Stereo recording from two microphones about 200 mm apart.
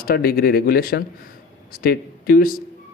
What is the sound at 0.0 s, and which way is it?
Speech, 50° left (ahead or behind).